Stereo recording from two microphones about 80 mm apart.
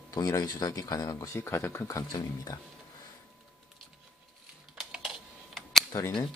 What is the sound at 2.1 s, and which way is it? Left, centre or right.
Speech, left.